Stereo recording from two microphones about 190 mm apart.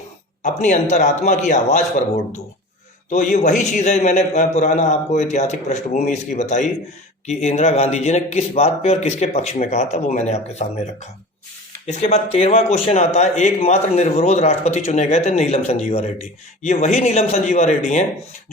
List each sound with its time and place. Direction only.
0.4 s speech: 40° left (ahead or behind)
3.1 s speech: 40° left (ahead or behind)